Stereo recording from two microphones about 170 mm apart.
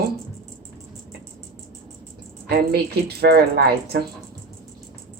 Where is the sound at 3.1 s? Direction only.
70° right (ahead or behind).